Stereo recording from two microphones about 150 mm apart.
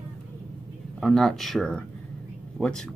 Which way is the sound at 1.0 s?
Centre (ahead or behind).